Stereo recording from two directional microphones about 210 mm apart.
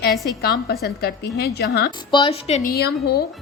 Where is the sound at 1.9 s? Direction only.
20° left (ahead or behind).